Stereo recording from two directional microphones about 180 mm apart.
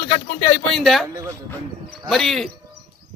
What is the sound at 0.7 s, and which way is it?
Speech, centre (ahead or behind).